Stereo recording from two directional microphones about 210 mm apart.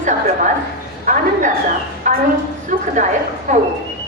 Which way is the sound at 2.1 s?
35° right (ahead or behind).